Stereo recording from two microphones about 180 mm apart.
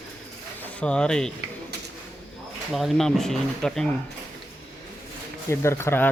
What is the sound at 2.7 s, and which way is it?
Speech, centre (ahead or behind).